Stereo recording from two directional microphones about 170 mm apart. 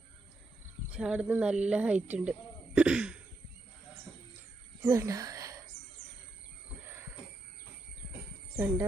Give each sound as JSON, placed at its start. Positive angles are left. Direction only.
{"t": 0.9, "sound": "speech", "side_deg": -5}
{"t": 2.7, "sound": "throat clearing", "side_deg": -5}
{"t": 4.8, "sound": "speech", "side_deg": -15}